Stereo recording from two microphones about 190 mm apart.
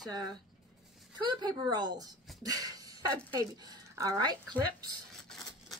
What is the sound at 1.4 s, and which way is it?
Speech, 20° right (ahead or behind).